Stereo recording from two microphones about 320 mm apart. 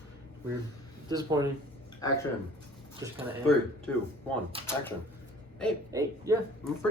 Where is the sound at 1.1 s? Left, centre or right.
Centre.